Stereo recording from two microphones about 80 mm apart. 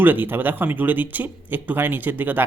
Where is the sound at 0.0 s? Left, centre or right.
Right.